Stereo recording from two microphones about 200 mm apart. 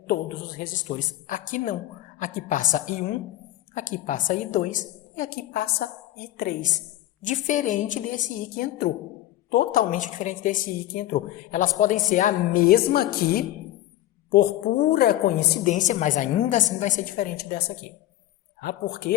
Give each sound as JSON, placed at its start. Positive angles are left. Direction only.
{"t": 0.1, "sound": "a woman's voice", "side_deg": 45}
{"t": 15.7, "sound": "a woman's voice", "side_deg": 40}